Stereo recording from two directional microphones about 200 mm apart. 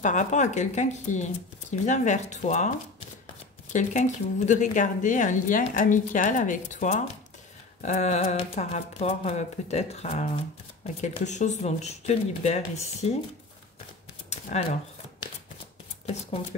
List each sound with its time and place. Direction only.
0.0 s a woman's voice: 40° left (ahead or behind)
3.7 s a woman's voice: 35° left (ahead or behind)
14.3 s speech: 35° left (ahead or behind)